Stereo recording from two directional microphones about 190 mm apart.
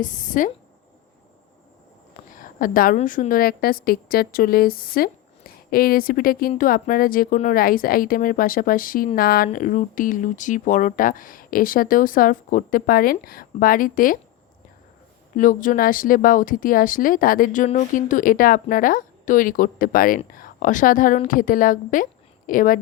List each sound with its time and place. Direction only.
0.0 s speech: 45° left (ahead or behind)
2.3 s a woman's voice: 45° left (ahead or behind)
15.4 s speech: 45° left (ahead or behind)